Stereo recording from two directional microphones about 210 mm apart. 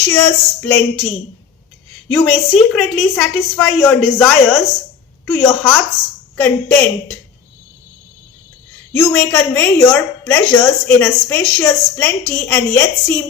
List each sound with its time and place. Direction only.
0.1 s a woman's voice: 10° left (ahead or behind)
8.9 s a woman's voice: 5° left (ahead or behind)